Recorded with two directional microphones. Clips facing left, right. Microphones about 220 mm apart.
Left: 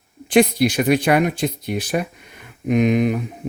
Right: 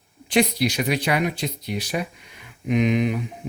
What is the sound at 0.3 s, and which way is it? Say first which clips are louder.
Speech: left 5 dB; 50° left (ahead or behind).